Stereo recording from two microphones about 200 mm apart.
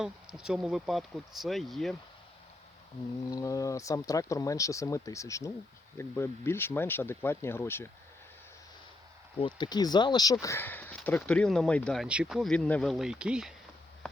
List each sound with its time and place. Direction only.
0.0 s speech: 5° right (ahead or behind)
3.2 s speech: 15° left (ahead or behind)
9.4 s speech: 20° left (ahead or behind); by 13.5 s 5° right (ahead or behind)